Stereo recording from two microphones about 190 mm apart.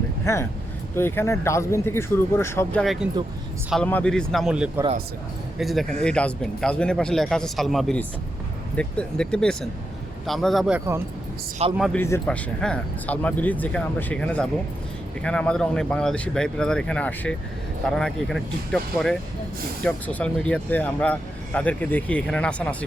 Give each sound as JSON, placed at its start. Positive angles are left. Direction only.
{"t": 0.3, "sound": "speech", "side_deg": 15}
{"t": 2.8, "sound": "speech", "side_deg": 0}
{"t": 11.6, "sound": "a man's voice", "side_deg": -30}
{"t": 11.9, "sound": "speech", "side_deg": 15}